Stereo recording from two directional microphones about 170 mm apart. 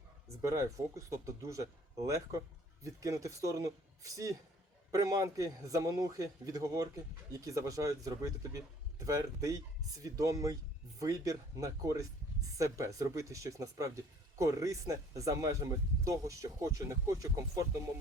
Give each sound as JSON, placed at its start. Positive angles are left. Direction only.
{"t": 0.4, "sound": "speech", "side_deg": -20}